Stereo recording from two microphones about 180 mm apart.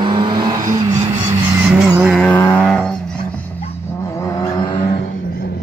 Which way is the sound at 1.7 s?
5° right (ahead or behind).